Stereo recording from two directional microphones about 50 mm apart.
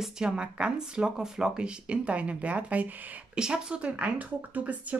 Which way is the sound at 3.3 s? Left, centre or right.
Centre.